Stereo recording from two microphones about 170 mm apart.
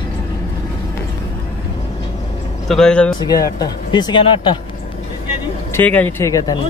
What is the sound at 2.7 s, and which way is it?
Speech, 5° left (ahead or behind).